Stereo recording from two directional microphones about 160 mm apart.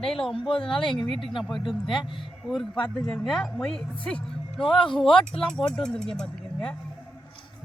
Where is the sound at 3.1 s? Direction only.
Centre (ahead or behind).